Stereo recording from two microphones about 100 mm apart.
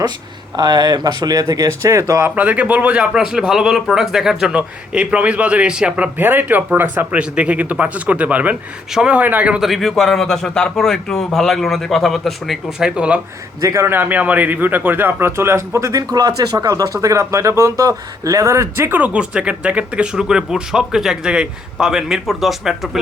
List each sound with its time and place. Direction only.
0.5 s speech: 45° right (ahead or behind)
2.2 s a man's voice: 15° right (ahead or behind)
9.6 s a man's voice: centre (ahead or behind)
13.6 s speech: 35° right (ahead or behind)
13.8 s a man's voice: 20° right (ahead or behind)
18.9 s a man's voice: 15° right (ahead or behind)